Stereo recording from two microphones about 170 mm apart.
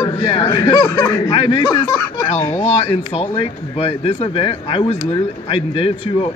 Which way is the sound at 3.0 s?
35° left (ahead or behind).